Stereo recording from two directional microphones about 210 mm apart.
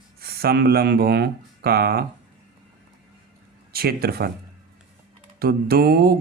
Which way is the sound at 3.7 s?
45° right (ahead or behind).